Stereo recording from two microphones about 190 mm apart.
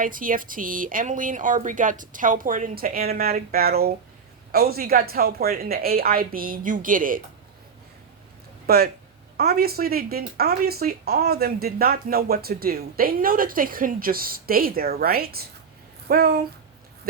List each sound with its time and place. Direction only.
0.0 s speech: 45° right (ahead or behind)
8.6 s speech: 55° right (ahead or behind)